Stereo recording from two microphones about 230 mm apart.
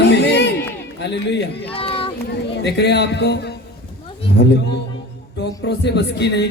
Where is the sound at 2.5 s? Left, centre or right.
Left.